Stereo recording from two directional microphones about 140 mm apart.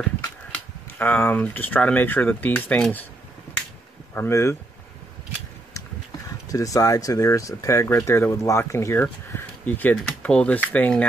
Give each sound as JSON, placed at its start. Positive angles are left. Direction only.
{"t": 0.9, "sound": "speech", "side_deg": 15}
{"t": 4.1, "sound": "speech", "side_deg": 20}
{"t": 6.5, "sound": "speech", "side_deg": 25}